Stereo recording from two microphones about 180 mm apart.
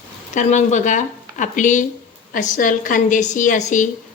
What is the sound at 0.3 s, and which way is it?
A woman's voice, 40° left (ahead or behind).